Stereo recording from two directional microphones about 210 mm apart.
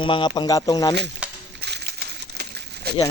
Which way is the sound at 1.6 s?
50° right (ahead or behind).